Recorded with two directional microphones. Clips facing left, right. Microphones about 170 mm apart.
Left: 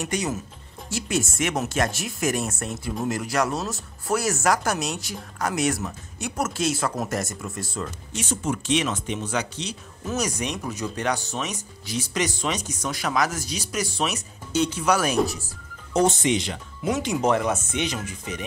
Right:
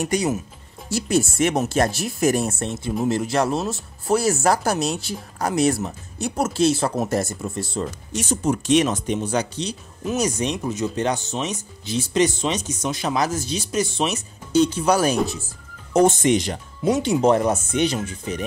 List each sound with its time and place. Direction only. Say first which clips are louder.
0.0 s speech: right 5 dB; 35° right (ahead or behind)
8.1 s speech: right 5 dB; 40° right (ahead or behind)
15.9 s speech: right 4 dB; 50° right (ahead or behind); by 18.4 s 30° right (ahead or behind)